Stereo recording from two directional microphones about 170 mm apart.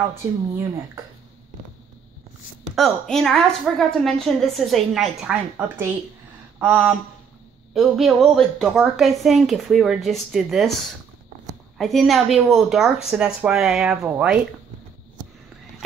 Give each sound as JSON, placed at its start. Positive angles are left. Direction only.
{"t": 0.1, "sound": "speech", "side_deg": -15}
{"t": 2.7, "sound": "a woman's voice", "side_deg": 0}
{"t": 11.8, "sound": "a woman's voice", "side_deg": 0}